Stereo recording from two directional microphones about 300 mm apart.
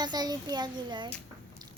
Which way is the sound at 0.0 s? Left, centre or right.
Centre.